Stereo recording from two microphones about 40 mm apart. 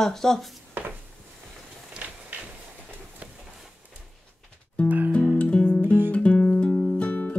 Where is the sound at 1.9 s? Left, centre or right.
Right.